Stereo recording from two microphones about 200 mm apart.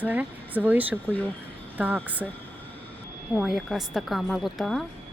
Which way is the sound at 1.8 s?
10° right (ahead or behind).